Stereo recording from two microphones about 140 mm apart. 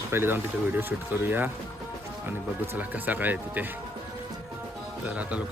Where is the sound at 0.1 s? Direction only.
15° right (ahead or behind).